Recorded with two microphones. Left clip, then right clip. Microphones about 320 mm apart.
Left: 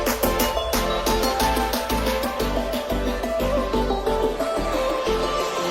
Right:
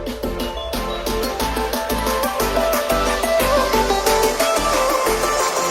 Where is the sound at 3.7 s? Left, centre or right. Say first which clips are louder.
Right 6 dB; right.